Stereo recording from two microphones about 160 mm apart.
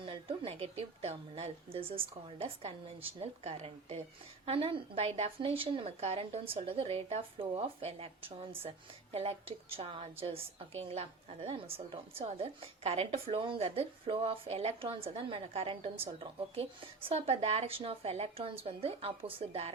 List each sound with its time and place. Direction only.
0.0 s a woman's voice: 35° right (ahead or behind)